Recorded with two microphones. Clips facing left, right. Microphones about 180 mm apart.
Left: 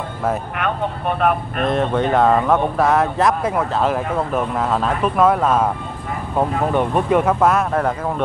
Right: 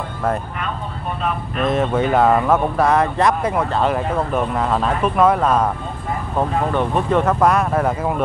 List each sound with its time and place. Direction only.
0.6 s speech: 65° left (ahead or behind)
1.7 s speech: 5° right (ahead or behind)
6.7 s speech: 10° left (ahead or behind); by 8.2 s 5° right (ahead or behind)